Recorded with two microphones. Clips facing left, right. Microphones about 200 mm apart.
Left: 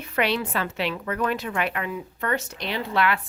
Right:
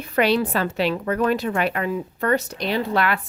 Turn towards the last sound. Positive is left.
turn(degrees=-45)  # may be behind; listen again after turning